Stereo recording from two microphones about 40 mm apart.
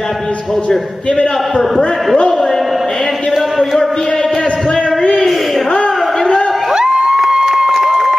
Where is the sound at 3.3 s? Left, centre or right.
Centre.